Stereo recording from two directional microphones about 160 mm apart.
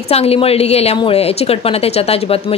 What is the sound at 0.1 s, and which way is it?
Speech, 40° left (ahead or behind).